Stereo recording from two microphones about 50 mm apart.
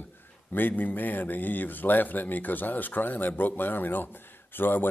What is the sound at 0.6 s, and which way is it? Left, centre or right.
Speech, left.